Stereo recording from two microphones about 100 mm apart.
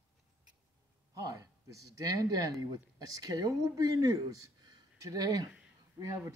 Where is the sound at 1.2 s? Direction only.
35° right (ahead or behind).